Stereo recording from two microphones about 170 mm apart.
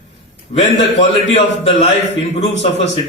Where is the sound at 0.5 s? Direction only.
45° left (ahead or behind).